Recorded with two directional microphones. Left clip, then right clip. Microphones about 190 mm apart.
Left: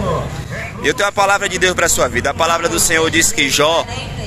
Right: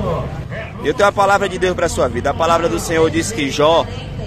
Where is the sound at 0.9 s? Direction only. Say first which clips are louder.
Right 1 dB; 10° right (ahead or behind).